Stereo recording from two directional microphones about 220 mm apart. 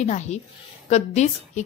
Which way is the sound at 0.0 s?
30° left (ahead or behind).